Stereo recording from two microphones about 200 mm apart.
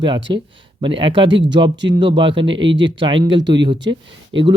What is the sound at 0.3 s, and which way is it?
Speech, 25° right (ahead or behind).